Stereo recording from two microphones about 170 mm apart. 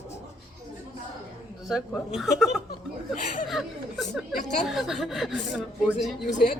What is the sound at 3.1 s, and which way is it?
Speech, 45° left (ahead or behind).